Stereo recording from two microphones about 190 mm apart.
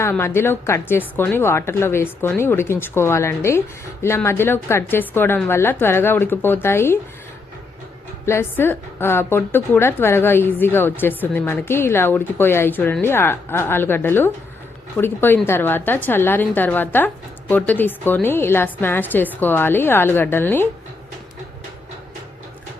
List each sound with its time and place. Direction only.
0.0 s a woman's voice: 10° left (ahead or behind)
8.3 s a woman's voice: 10° left (ahead or behind)